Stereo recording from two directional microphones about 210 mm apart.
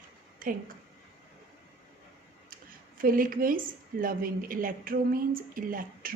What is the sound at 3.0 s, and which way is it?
A woman's voice, 40° right (ahead or behind).